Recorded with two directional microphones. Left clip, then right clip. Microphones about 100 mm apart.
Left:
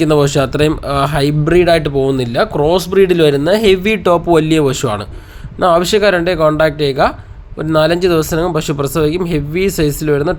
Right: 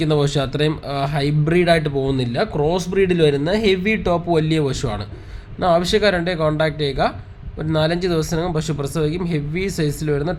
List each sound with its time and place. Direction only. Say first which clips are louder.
0.0 s speech: left 8 dB; 35° left (ahead or behind)
1.5 s speech: left 6 dB; 25° left (ahead or behind)